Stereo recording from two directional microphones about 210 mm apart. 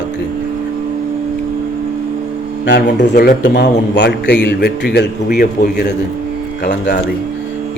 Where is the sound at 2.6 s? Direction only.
55° left (ahead or behind).